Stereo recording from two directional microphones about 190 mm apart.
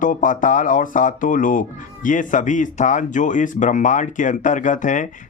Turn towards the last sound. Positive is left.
turn(degrees=40)  # may be behind; listen again after turning